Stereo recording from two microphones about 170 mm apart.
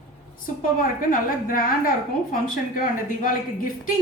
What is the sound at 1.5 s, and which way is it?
A woman's voice, 55° left (ahead or behind).